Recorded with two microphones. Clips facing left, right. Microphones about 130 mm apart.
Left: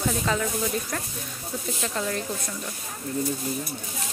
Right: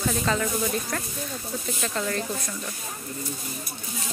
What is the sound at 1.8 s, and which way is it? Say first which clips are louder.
Speech: right 1 dB; 10° left (ahead or behind).